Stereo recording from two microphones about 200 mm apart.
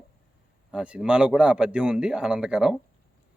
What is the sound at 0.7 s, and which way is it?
Speech, 5° right (ahead or behind).